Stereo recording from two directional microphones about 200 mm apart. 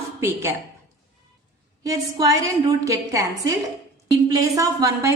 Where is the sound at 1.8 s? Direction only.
15° right (ahead or behind).